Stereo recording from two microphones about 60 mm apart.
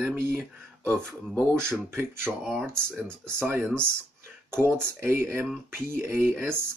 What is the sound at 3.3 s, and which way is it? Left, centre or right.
Speech, right.